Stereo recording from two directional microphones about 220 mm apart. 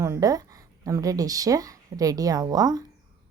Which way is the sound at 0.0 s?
15° right (ahead or behind).